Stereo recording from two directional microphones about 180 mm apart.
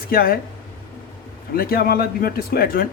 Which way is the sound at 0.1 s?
55° left (ahead or behind).